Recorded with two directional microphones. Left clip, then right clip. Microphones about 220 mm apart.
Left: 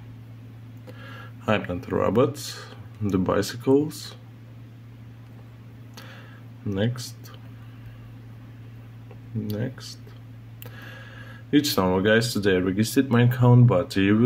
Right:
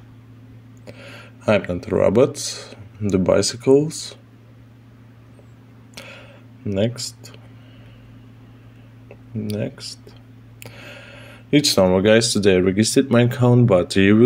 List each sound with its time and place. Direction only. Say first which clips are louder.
0.8 s speech: right 4 dB; 20° right (ahead or behind)
6.7 s speech: right 6 dB; 20° right (ahead or behind)
9.5 s speech: right 6 dB; 15° right (ahead or behind)